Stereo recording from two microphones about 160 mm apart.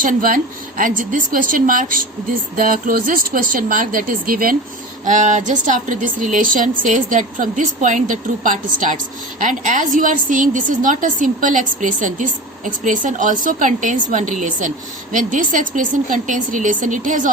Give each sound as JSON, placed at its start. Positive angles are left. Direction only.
{"t": 0.0, "sound": "a woman's voice", "side_deg": -60}
{"t": 5.0, "sound": "a woman's voice", "side_deg": -50}